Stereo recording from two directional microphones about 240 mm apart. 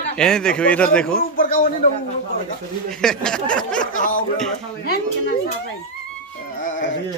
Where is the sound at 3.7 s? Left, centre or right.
Left.